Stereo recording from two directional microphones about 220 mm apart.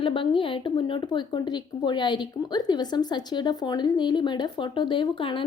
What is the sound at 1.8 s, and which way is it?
A woman's voice, 20° left (ahead or behind).